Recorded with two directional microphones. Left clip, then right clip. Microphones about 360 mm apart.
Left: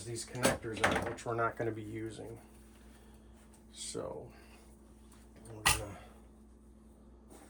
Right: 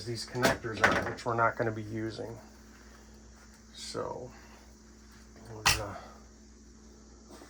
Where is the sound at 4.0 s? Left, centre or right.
Centre.